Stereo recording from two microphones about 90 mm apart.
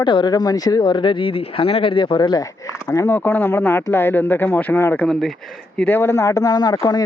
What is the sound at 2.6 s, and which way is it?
Speech, 35° left (ahead or behind).